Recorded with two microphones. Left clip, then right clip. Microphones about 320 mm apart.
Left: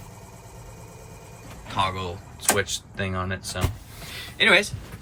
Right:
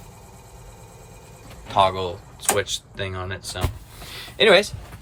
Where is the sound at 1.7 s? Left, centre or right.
Centre.